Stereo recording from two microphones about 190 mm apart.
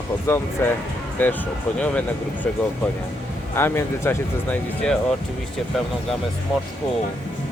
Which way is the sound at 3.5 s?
15° left (ahead or behind).